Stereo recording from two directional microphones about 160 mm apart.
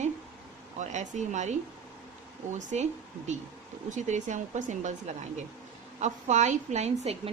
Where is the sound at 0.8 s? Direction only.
45° right (ahead or behind).